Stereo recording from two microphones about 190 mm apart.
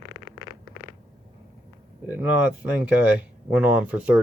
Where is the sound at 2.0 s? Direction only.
10° right (ahead or behind).